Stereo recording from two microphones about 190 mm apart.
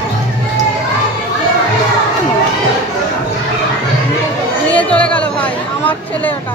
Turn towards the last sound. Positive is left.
turn(degrees=5)  # may be behind; listen again after turning